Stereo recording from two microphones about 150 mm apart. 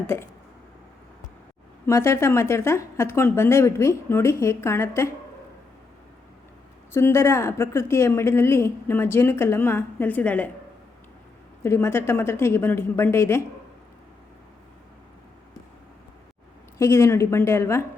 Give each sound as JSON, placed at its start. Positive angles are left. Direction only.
{"t": 1.9, "sound": "a woman's voice", "side_deg": 20}
{"t": 6.9, "sound": "a woman's voice", "side_deg": 15}
{"t": 11.6, "sound": "a woman's voice", "side_deg": 15}
{"t": 16.7, "sound": "a woman's voice", "side_deg": 20}